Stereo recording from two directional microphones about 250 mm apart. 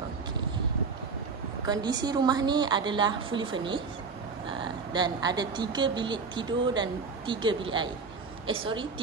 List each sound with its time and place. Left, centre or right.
1.7 s a woman's voice: centre